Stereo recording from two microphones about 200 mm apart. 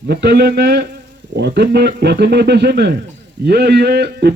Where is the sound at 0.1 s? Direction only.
55° right (ahead or behind).